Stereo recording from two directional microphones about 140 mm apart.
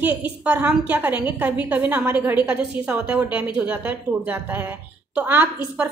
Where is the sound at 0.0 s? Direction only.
10° right (ahead or behind).